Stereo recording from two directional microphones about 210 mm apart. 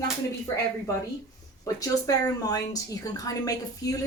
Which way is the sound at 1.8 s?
15° left (ahead or behind).